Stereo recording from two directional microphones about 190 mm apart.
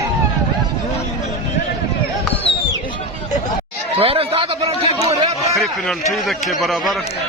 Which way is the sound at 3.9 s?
30° right (ahead or behind).